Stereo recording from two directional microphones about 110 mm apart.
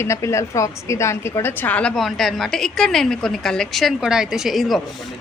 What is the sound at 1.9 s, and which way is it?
A woman's voice, centre (ahead or behind).